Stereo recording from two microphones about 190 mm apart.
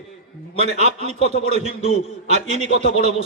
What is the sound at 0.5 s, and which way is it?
Speech, 35° right (ahead or behind).